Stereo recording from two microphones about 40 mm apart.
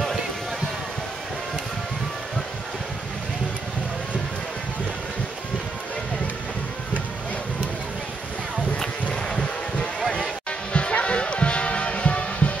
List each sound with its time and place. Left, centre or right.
10.7 s music: left